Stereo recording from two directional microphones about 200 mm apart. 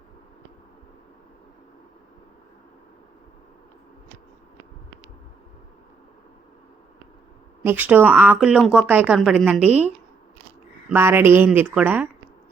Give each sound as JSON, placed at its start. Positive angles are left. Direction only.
{"t": 7.6, "sound": "speech", "side_deg": -10}